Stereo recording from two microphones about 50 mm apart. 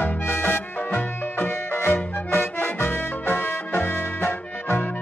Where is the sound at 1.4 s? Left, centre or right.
Left.